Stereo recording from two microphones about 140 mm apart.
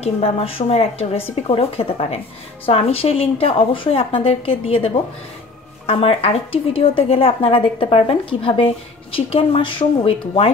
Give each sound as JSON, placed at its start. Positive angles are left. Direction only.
{"t": 0.0, "sound": "a woman's voice", "side_deg": 45}